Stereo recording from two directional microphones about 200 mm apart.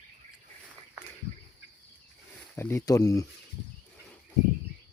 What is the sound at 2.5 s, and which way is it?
Speech, 15° left (ahead or behind).